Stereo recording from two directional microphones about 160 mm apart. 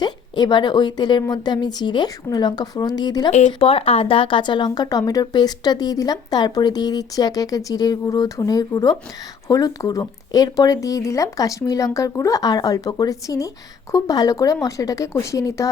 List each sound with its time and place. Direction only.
0.0 s speech: 25° left (ahead or behind)
3.3 s speech: 40° left (ahead or behind); by 15.7 s 20° left (ahead or behind)